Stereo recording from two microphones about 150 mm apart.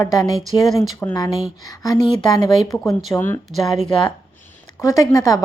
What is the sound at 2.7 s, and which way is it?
Speech, centre (ahead or behind).